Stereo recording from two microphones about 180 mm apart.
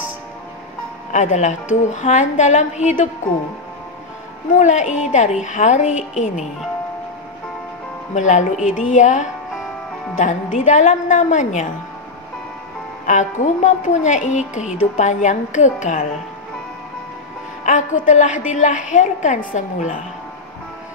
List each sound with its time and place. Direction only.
1.1 s a woman's voice: 40° left (ahead or behind)
4.6 s a woman's voice: 40° left (ahead or behind)
8.1 s a woman's voice: 45° left (ahead or behind)
13.0 s a woman's voice: 45° left (ahead or behind)
17.6 s a woman's voice: 45° left (ahead or behind)